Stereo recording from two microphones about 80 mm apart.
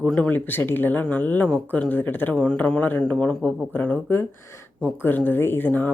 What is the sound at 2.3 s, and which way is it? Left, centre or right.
Speech, centre.